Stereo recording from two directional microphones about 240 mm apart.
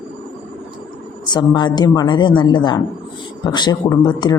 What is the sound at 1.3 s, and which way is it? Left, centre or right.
Speech, centre.